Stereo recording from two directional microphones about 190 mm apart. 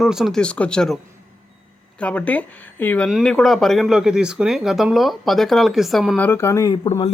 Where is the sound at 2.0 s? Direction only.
5° left (ahead or behind).